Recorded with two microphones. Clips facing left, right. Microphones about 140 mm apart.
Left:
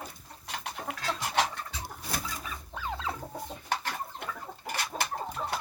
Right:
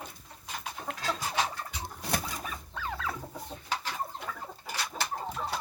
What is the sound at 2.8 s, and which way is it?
Chicken, 25° left (ahead or behind).